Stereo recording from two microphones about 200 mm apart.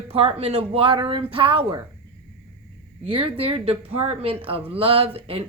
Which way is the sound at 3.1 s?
25° right (ahead or behind).